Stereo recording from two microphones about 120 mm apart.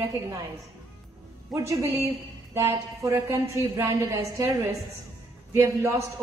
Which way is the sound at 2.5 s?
25° right (ahead or behind).